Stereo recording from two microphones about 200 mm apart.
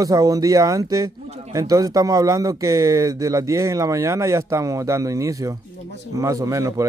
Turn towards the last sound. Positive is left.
turn(degrees=-15)  # may be behind; listen again after turning